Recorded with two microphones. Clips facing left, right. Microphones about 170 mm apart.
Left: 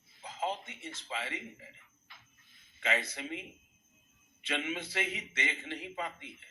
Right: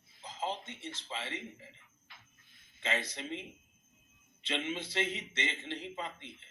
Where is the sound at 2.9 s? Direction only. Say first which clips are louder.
Even; 10° left (ahead or behind).